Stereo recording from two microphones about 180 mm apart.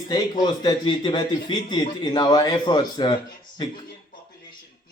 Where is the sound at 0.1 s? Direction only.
25° left (ahead or behind).